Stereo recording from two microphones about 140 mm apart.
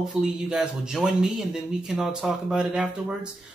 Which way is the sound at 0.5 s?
5° right (ahead or behind).